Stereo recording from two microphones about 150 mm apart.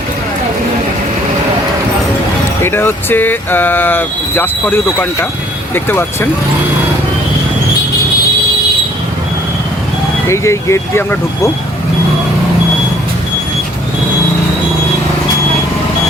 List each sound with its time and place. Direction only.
2.6 s speech: 15° left (ahead or behind)
10.2 s speech: 20° left (ahead or behind)